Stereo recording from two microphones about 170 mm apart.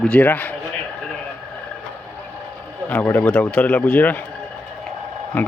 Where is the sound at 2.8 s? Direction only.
10° left (ahead or behind).